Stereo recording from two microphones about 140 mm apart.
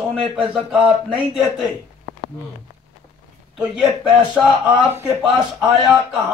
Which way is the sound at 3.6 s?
5° right (ahead or behind).